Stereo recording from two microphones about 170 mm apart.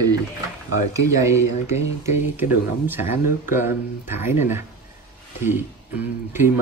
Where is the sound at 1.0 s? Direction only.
15° right (ahead or behind).